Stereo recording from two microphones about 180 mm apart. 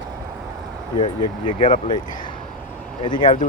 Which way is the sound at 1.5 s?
45° left (ahead or behind).